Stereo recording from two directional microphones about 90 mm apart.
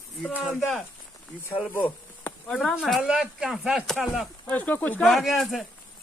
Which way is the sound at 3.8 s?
Centre (ahead or behind).